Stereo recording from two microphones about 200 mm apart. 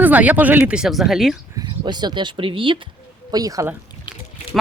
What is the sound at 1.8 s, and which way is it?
Speech, 20° right (ahead or behind).